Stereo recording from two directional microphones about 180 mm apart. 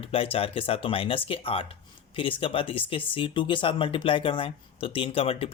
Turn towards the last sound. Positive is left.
turn(degrees=30)  # may be behind; listen again after turning